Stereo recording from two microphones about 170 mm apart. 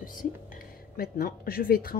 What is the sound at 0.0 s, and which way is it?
Whispering, 50° left (ahead or behind).